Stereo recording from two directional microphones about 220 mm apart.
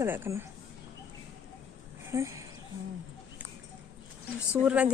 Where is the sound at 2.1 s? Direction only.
15° right (ahead or behind).